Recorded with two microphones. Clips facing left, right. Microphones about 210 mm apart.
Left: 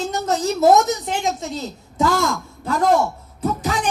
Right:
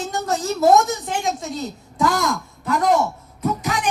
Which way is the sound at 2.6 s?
30° left (ahead or behind).